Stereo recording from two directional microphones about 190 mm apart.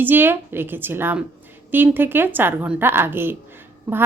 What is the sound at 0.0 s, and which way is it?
Speech, 10° right (ahead or behind).